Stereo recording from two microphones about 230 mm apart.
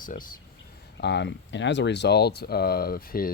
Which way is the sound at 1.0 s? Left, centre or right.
Left.